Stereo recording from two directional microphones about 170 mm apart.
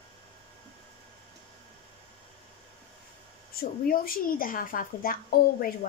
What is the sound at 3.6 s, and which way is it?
Speech, 60° left (ahead or behind).